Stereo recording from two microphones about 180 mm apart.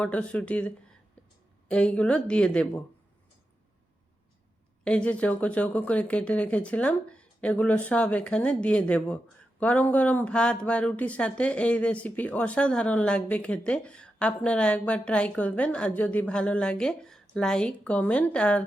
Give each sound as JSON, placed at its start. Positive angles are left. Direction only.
{"t": 0.0, "sound": "a woman's voice", "side_deg": 5}
{"t": 4.8, "sound": "speech", "side_deg": 5}